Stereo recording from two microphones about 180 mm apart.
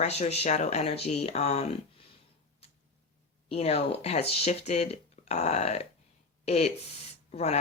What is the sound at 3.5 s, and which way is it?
Speech, 35° left (ahead or behind).